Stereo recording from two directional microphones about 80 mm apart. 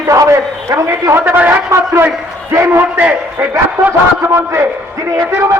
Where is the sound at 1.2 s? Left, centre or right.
Right.